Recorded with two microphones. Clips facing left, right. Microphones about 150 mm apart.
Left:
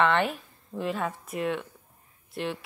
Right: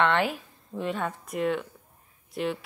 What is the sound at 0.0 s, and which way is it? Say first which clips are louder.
Speech: even; centre (ahead or behind).